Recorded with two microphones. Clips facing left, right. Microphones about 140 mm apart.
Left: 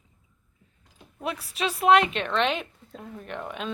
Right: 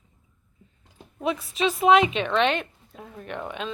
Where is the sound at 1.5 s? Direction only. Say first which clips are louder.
Right 1 dB; centre (ahead or behind).